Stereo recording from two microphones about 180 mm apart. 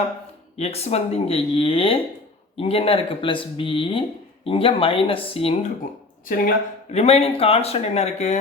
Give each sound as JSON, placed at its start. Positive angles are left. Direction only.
{"t": 0.5, "sound": "speech", "side_deg": 35}
{"t": 6.2, "sound": "speech", "side_deg": 50}
{"t": 6.9, "sound": "speech", "side_deg": 35}